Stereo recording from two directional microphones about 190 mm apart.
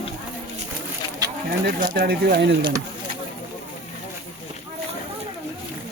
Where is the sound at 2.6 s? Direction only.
25° right (ahead or behind).